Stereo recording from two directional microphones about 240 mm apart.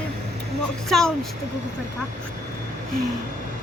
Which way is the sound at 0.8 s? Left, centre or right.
Centre.